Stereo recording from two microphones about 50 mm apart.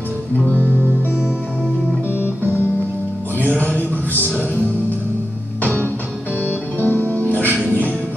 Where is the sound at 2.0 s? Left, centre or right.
Right.